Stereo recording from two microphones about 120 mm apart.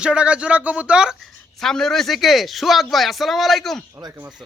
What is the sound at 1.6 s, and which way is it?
Speech, 5° left (ahead or behind).